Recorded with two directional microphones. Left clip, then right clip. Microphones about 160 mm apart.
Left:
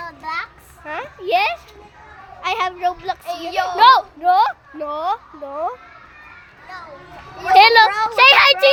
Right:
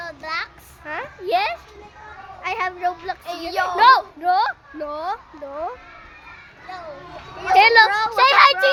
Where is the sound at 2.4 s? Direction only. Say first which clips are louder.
Left 3 dB; 20° left (ahead or behind).